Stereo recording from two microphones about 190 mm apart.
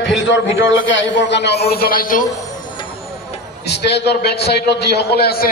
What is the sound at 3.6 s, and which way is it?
A man's voice, 65° left (ahead or behind).